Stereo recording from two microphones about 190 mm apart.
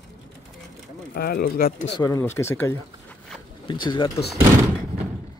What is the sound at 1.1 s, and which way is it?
Speech, 55° left (ahead or behind).